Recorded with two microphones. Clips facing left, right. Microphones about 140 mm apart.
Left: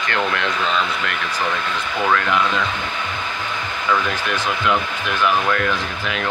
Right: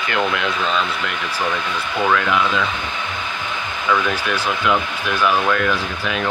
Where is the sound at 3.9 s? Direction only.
10° right (ahead or behind).